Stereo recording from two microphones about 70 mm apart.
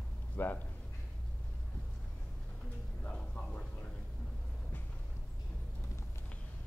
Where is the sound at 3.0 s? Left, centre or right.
Centre.